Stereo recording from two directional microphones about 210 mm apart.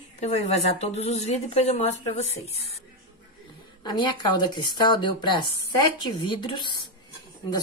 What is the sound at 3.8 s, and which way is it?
Speech, 20° left (ahead or behind).